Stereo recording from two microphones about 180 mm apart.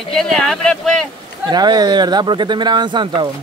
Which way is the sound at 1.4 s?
25° right (ahead or behind).